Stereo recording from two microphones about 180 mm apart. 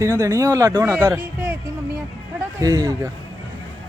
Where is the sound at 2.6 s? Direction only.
20° right (ahead or behind).